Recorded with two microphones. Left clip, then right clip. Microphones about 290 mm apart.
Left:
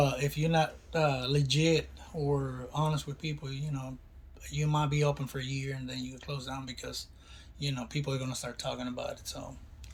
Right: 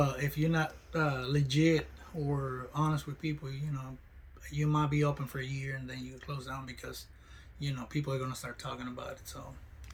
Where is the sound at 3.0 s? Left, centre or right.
Right.